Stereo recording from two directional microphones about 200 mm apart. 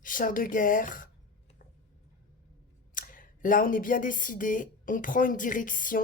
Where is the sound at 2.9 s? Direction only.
45° left (ahead or behind).